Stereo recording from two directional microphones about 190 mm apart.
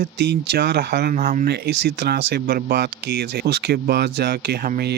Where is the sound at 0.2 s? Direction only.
60° right (ahead or behind).